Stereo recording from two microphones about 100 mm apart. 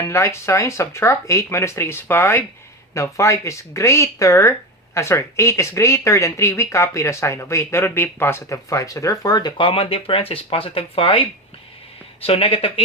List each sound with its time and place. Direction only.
0.1 s speech: 30° left (ahead or behind); by 9.6 s 45° left (ahead or behind)
9.6 s speech: 70° left (ahead or behind)